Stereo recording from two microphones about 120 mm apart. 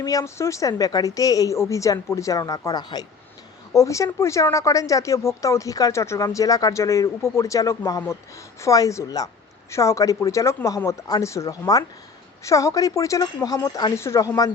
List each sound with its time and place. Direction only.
0.0 s speech: 30° left (ahead or behind)